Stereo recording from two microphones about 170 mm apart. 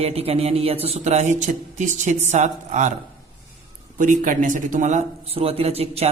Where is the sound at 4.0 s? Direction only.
50° right (ahead or behind).